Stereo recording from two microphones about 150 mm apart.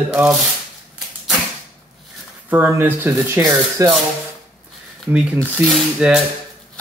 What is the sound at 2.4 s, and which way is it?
Speech, 15° right (ahead or behind).